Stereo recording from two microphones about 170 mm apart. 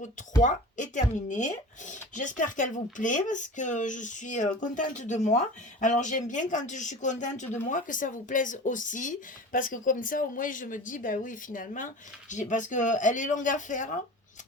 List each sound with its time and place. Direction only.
0.4 s speech: 45° left (ahead or behind)